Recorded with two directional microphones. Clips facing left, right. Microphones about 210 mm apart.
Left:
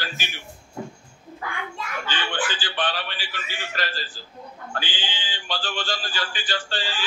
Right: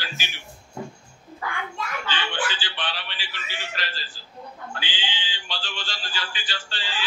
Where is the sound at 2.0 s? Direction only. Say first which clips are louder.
Left 2 dB; 50° left (ahead or behind).